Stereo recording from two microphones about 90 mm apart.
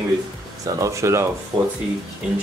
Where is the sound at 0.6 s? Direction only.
40° right (ahead or behind).